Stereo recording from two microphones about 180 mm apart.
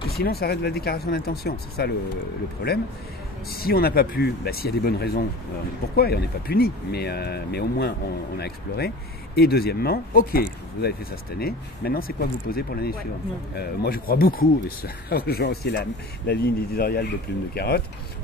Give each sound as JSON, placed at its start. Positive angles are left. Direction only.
{"t": 0.2, "sound": "speech", "side_deg": 60}
{"t": 3.4, "sound": "speech", "side_deg": 55}